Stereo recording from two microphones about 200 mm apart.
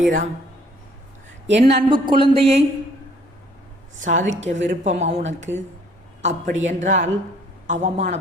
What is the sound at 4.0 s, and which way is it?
Speech, 40° right (ahead or behind).